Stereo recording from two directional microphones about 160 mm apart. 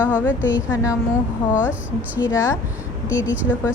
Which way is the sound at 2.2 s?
15° left (ahead or behind).